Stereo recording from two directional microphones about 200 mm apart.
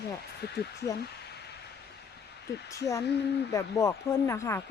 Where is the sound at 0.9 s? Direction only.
55° left (ahead or behind).